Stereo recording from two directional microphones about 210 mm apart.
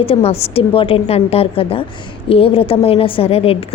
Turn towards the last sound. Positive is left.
turn(degrees=25)  # may be behind; listen again after turning